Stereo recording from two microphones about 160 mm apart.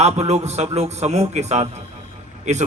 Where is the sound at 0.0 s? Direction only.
40° right (ahead or behind).